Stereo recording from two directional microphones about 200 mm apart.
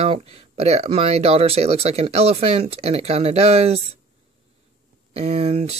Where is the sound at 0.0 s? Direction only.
30° right (ahead or behind).